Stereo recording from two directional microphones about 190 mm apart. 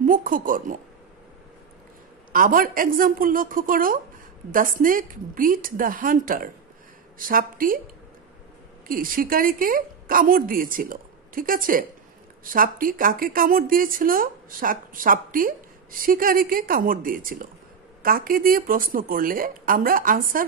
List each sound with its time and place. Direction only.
0.0 s speech: 45° right (ahead or behind)
2.3 s speech: 45° right (ahead or behind)
8.8 s a woman's voice: 45° right (ahead or behind)